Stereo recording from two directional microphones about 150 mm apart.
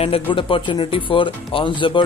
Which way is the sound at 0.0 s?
35° left (ahead or behind).